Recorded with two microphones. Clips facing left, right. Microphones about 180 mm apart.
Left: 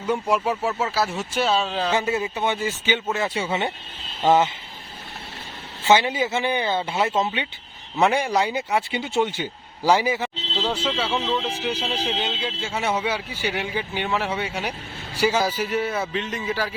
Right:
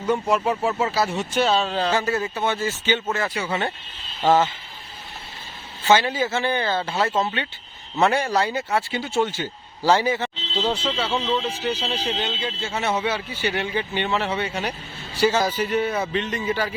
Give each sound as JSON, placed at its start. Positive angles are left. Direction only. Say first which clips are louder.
{"t": 0.0, "sound": "speech", "louder": "right 1 dB", "side_deg": 10}
{"t": 1.9, "sound": "speech", "louder": "even", "side_deg": 15}
{"t": 3.2, "sound": "speech", "louder": "left 1 dB", "side_deg": 25}
{"t": 5.8, "sound": "speech", "louder": "even", "side_deg": 20}
{"t": 10.6, "sound": "speech", "louder": "right 1 dB", "side_deg": -5}
{"t": 11.4, "sound": "speech", "louder": "right 1 dB", "side_deg": 10}